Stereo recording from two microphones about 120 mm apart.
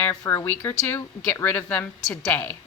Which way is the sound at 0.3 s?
20° left (ahead or behind).